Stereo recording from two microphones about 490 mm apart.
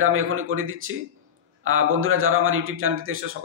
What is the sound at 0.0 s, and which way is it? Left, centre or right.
A man's voice, right.